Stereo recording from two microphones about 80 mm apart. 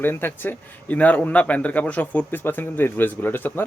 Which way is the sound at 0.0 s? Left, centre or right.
Left.